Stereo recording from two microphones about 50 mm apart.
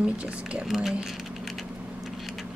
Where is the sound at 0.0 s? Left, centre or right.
Right.